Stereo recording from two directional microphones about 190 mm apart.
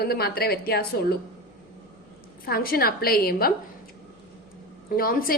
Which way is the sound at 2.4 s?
50° left (ahead or behind).